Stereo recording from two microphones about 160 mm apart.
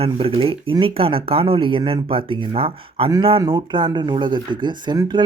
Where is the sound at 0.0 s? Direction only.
35° right (ahead or behind).